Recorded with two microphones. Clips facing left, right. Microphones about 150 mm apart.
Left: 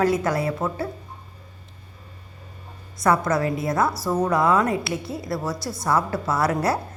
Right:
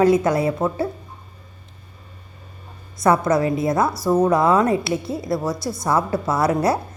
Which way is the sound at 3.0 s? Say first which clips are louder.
Right 3 dB; 25° right (ahead or behind).